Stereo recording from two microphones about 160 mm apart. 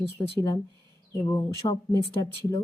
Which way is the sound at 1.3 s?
25° left (ahead or behind).